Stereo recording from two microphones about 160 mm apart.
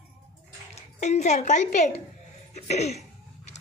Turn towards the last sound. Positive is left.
turn(degrees=45)  # may be behind; listen again after turning